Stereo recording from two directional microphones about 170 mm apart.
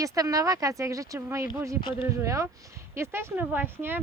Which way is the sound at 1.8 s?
30° left (ahead or behind).